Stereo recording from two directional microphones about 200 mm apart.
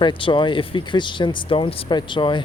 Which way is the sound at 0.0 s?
25° left (ahead or behind).